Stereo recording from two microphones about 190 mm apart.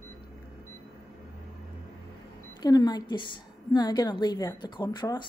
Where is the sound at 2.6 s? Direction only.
20° left (ahead or behind).